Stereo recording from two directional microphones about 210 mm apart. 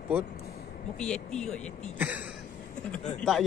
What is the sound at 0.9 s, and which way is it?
Speech, 5° left (ahead or behind).